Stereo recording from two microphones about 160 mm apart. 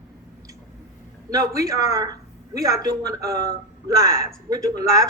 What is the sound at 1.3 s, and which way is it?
Speech, 20° right (ahead or behind).